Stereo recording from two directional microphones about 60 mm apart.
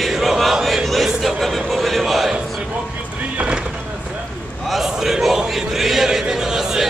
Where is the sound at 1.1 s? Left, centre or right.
Centre.